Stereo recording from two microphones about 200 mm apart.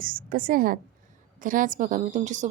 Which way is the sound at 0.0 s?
45° right (ahead or behind).